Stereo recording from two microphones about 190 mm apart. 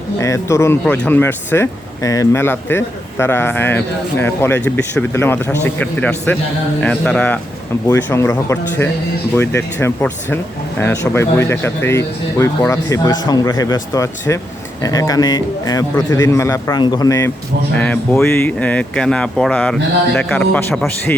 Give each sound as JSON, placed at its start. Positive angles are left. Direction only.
{"t": 0.2, "sound": "a man's voice", "side_deg": 15}